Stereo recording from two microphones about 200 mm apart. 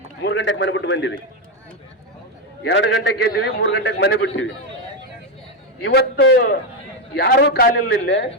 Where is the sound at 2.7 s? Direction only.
60° left (ahead or behind).